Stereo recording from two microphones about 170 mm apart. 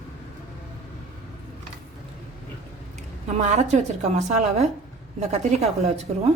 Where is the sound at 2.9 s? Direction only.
45° right (ahead or behind).